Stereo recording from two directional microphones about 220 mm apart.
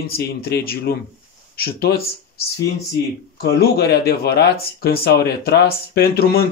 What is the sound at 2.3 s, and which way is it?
Speech, 45° left (ahead or behind).